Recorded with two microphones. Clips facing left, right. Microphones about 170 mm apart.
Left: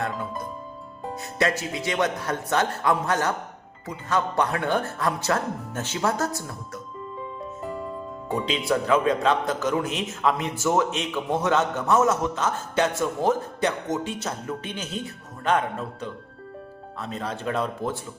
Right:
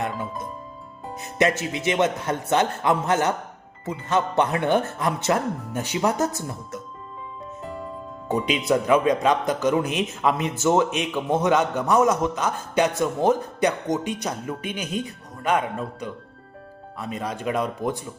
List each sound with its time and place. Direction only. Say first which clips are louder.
1.4 s speech: right 3 dB; 20° right (ahead or behind)
7.6 s music: left 2 dB; centre (ahead or behind)
8.3 s a man's voice: right 3 dB; 20° right (ahead or behind)